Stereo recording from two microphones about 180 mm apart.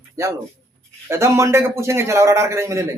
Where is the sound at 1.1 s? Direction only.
15° right (ahead or behind).